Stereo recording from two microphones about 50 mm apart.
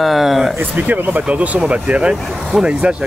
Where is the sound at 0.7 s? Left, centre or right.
Right.